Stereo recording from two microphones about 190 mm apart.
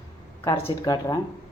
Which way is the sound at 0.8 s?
20° left (ahead or behind).